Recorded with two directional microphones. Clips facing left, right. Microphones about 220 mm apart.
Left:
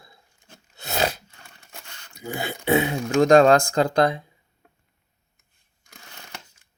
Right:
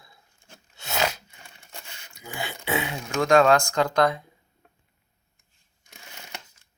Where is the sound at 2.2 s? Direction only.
45° left (ahead or behind).